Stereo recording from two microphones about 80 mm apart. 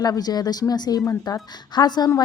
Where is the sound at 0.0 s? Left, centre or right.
Left.